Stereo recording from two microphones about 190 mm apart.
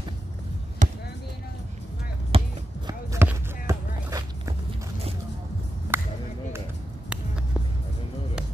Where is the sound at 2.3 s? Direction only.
30° right (ahead or behind).